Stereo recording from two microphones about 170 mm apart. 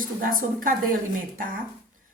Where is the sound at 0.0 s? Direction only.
55° right (ahead or behind).